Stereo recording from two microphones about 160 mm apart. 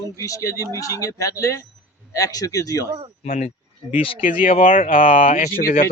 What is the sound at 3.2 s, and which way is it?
Speech, 50° left (ahead or behind).